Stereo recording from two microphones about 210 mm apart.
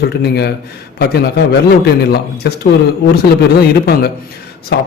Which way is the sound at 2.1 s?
50° left (ahead or behind).